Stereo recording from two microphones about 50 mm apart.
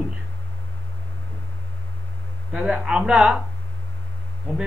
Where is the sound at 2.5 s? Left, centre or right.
Centre.